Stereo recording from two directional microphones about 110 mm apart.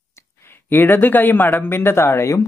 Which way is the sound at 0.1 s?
20° left (ahead or behind).